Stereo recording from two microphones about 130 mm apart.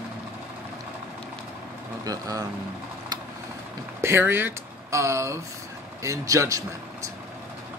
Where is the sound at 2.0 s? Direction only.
30° right (ahead or behind).